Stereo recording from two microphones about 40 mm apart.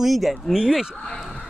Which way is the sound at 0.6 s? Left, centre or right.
Centre.